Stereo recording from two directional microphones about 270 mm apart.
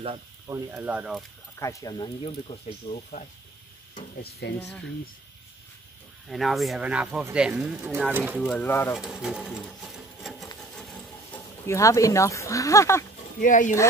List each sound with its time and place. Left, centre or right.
0.0 s speech: centre
0.7 s speech: centre
1.6 s speech: centre
4.2 s speech: left
6.2 s speech: centre
11.3 s speech: centre
13.4 s speech: left